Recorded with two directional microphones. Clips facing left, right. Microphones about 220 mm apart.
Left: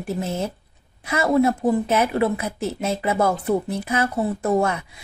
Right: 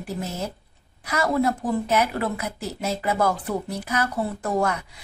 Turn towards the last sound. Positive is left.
turn(degrees=25)  # may be behind; listen again after turning